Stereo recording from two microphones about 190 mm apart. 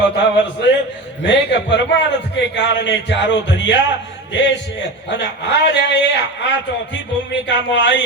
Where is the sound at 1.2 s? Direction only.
70° left (ahead or behind).